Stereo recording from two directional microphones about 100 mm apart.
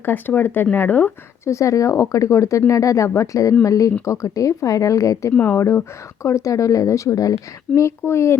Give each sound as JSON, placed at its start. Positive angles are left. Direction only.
{"t": 0.0, "sound": "speech", "side_deg": 20}
{"t": 1.5, "sound": "speech", "side_deg": 30}